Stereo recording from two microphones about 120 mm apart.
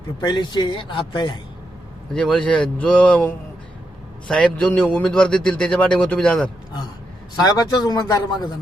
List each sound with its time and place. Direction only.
0.2 s speech: 40° left (ahead or behind)
2.1 s a man's voice: 5° left (ahead or behind)
7.4 s speech: 30° left (ahead or behind)